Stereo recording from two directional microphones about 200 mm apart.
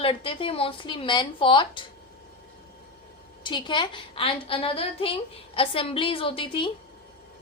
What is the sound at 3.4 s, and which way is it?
A woman's voice, 20° left (ahead or behind).